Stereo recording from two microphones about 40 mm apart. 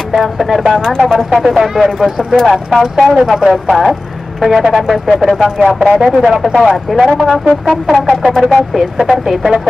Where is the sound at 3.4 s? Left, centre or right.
Centre.